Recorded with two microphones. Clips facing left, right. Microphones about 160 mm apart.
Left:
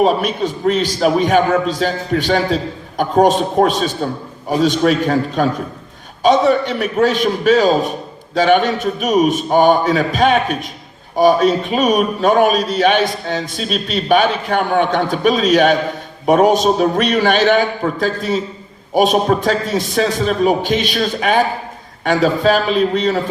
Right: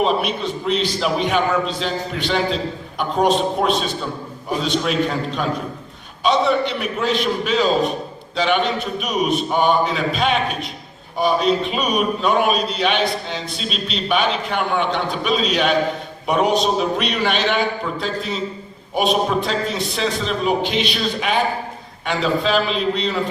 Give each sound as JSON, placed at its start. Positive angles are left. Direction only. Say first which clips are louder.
{"t": 0.0, "sound": "a man's voice", "louder": "left 5 dB", "side_deg": 45}